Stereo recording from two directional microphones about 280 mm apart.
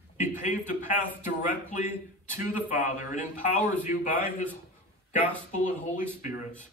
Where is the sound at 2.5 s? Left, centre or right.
Left.